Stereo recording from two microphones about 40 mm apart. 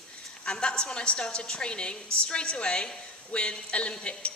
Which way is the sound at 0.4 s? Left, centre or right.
Left.